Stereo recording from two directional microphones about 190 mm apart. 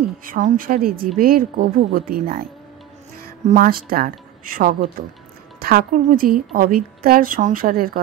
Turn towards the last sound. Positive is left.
turn(degrees=-50)  # may be behind; listen again after turning